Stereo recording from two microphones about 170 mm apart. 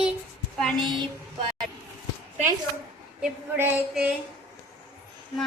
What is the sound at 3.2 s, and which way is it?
Female singing, 10° right (ahead or behind).